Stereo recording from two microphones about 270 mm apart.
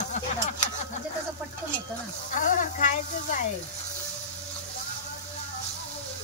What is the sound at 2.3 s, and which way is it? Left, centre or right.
Sizzle, left.